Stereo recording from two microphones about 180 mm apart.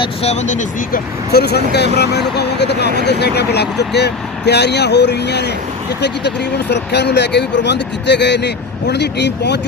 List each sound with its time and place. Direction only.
0.0 s speech: 35° left (ahead or behind)
1.3 s speech: 65° left (ahead or behind)